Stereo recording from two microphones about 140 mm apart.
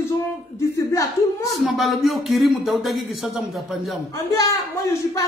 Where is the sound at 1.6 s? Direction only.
Centre (ahead or behind).